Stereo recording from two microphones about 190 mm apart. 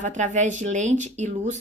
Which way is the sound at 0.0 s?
40° right (ahead or behind).